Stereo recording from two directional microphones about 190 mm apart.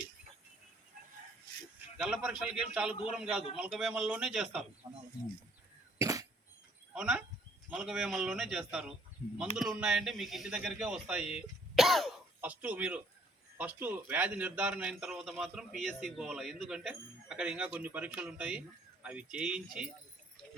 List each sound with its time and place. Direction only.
2.0 s a man's voice: 5° right (ahead or behind)
4.8 s speech: 20° right (ahead or behind)
6.0 s cough: 15° right (ahead or behind)
6.9 s a man's voice: 5° right (ahead or behind)